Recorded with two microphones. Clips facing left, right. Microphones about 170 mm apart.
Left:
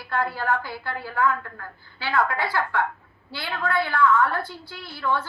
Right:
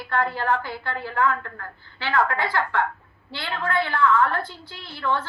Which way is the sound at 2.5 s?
10° left (ahead or behind).